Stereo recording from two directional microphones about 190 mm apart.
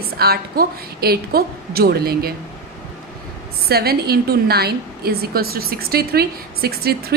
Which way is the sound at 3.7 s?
55° right (ahead or behind).